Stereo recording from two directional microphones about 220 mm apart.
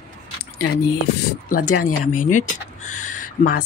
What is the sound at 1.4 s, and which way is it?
Speech, 40° left (ahead or behind).